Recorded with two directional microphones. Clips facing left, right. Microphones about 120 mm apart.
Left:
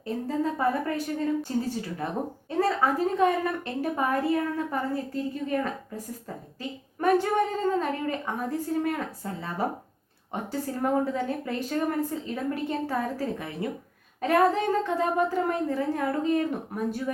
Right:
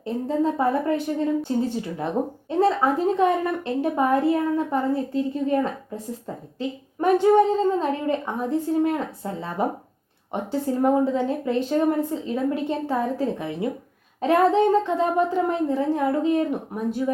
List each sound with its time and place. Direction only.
0.0 s a woman's voice: 20° right (ahead or behind)